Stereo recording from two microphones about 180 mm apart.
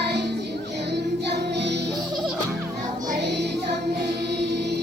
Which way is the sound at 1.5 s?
70° right (ahead or behind).